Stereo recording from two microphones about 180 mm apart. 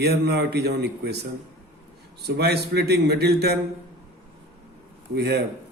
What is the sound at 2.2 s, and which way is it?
Speech, 65° right (ahead or behind).